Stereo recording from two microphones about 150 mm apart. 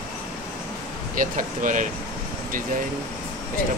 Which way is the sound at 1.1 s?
60° right (ahead or behind).